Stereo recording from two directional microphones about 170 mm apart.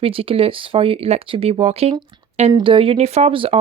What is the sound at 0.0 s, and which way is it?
Speech, 35° right (ahead or behind).